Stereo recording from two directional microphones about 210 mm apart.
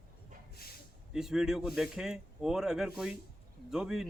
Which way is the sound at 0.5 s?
45° left (ahead or behind).